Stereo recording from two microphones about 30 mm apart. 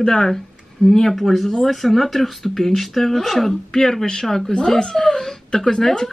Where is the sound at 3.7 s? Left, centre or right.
Centre.